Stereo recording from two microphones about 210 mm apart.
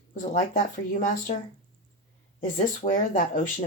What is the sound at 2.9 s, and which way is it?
Speech, 40° left (ahead or behind).